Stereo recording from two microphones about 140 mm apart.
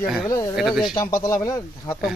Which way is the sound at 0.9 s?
25° left (ahead or behind).